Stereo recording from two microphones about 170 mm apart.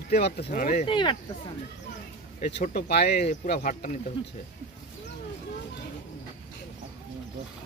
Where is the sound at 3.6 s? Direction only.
55° left (ahead or behind).